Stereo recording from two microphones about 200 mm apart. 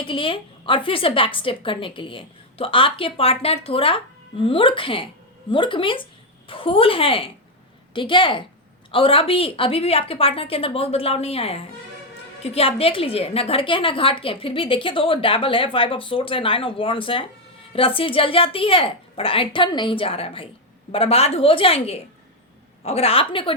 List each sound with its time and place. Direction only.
0.0 s a woman's voice: 25° left (ahead or behind)